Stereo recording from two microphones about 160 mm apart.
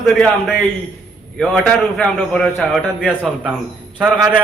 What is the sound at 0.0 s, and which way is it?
A man's voice, centre (ahead or behind).